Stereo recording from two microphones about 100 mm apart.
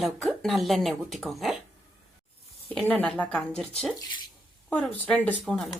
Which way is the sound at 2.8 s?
10° left (ahead or behind).